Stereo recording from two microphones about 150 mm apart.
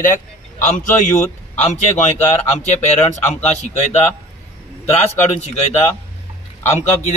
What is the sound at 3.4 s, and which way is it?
Speech, 50° left (ahead or behind).